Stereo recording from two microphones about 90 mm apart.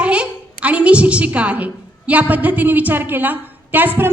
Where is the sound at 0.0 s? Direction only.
15° right (ahead or behind).